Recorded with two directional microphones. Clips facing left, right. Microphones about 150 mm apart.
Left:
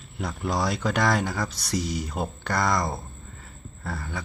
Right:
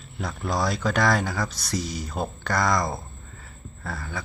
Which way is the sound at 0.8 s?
20° left (ahead or behind).